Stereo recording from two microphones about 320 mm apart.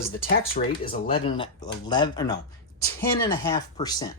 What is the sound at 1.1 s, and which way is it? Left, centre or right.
Speech, centre.